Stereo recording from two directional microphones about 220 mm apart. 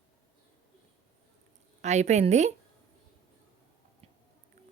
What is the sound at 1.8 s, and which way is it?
Speech, 30° right (ahead or behind).